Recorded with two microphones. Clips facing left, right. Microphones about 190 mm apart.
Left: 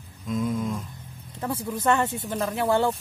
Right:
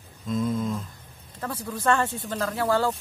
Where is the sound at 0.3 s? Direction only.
10° left (ahead or behind).